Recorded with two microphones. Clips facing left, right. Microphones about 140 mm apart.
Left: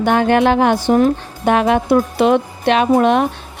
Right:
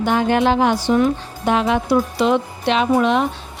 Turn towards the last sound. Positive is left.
turn(degrees=55)  # may be behind; listen again after turning